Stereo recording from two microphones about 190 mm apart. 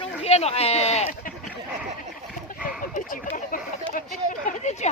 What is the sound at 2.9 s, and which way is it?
Speech, 45° left (ahead or behind).